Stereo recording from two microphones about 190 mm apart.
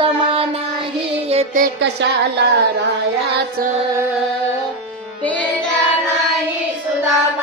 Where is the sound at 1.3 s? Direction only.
40° right (ahead or behind).